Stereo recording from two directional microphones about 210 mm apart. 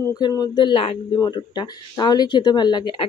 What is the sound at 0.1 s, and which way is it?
Speech, 15° left (ahead or behind).